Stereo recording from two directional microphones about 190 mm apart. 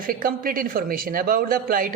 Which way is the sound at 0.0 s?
50° right (ahead or behind).